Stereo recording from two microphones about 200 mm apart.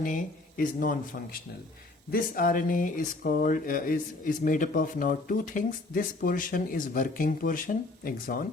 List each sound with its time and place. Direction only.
0.0 s speech: 40° left (ahead or behind)